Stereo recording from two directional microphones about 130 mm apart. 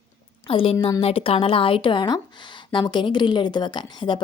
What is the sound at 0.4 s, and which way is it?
A woman's voice, 45° left (ahead or behind).